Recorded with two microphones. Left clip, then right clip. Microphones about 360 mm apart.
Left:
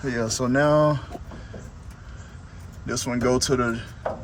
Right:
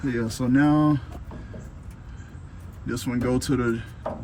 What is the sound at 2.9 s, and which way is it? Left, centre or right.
Speech, centre.